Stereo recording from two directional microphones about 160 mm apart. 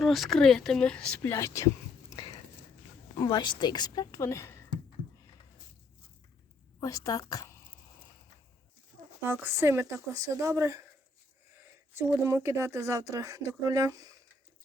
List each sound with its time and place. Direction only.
0.0 s a woman's voice: centre (ahead or behind); by 4.6 s 15° left (ahead or behind)
6.7 s a woman's voice: 20° left (ahead or behind)
9.2 s speech: 15° right (ahead or behind)
11.9 s speech: 15° right (ahead or behind)